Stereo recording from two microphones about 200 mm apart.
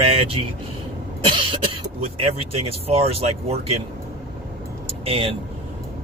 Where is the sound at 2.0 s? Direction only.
30° right (ahead or behind).